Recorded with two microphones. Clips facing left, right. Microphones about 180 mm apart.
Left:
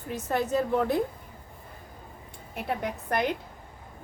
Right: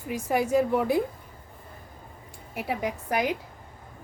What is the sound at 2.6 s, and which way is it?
Speech, 10° right (ahead or behind).